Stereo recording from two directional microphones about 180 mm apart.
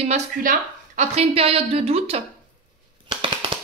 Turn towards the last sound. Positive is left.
turn(degrees=-30)  # may be behind; listen again after turning